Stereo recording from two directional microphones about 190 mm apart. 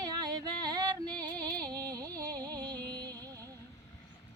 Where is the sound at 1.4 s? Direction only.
20° right (ahead or behind).